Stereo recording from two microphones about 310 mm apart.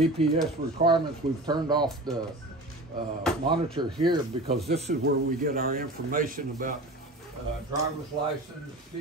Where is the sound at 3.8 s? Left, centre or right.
Centre.